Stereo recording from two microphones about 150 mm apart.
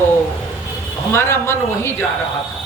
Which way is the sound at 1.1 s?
15° left (ahead or behind).